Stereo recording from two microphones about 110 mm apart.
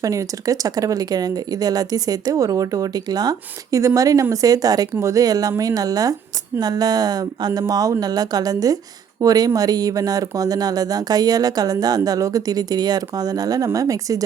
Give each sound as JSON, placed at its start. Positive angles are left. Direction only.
{"t": 0.0, "sound": "speech", "side_deg": -30}